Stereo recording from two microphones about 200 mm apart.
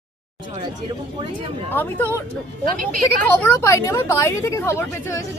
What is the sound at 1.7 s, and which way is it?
Speech, 10° left (ahead or behind).